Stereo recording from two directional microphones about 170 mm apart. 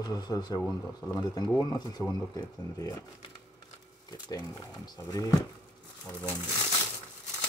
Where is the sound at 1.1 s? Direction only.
25° left (ahead or behind).